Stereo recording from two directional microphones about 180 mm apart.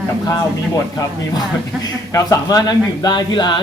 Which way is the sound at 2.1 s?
20° left (ahead or behind).